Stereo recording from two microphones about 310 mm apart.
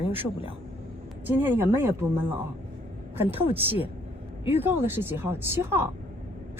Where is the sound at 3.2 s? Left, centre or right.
Centre.